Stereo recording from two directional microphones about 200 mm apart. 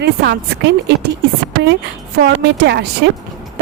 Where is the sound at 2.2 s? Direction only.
55° right (ahead or behind).